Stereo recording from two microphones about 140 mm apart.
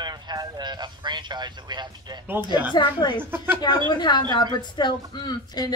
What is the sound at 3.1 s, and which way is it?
Speech, 15° right (ahead or behind).